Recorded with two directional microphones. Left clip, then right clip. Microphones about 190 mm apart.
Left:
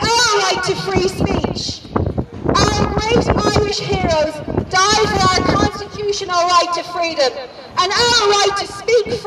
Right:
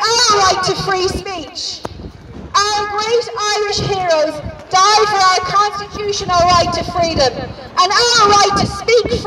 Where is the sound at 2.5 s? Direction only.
5° left (ahead or behind).